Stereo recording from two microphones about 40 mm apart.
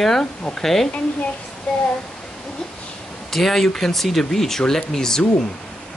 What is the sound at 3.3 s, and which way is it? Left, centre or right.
A child's voice, centre.